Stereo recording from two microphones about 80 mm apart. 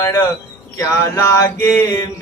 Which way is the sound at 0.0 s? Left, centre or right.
Left.